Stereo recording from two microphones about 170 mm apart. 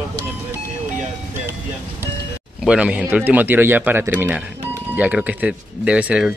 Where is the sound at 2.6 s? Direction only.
5° right (ahead or behind).